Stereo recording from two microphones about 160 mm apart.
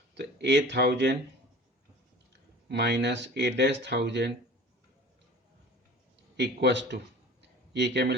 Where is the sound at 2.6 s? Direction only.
90° right.